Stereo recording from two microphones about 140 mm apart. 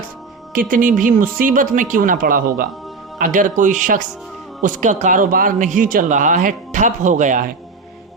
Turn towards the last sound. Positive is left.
turn(degrees=-70)  # may be behind; listen again after turning